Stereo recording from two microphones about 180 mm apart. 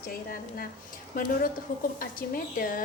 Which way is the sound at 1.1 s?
50° left (ahead or behind).